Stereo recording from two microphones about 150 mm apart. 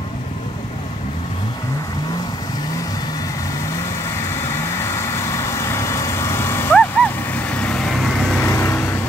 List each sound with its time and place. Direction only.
4.3 s vehicle: 20° left (ahead or behind)
8.4 s vehicle: 20° left (ahead or behind)